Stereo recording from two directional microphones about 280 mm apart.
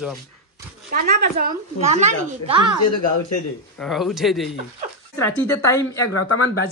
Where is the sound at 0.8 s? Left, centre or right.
Right.